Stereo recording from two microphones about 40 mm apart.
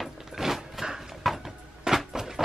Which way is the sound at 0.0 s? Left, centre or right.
Centre.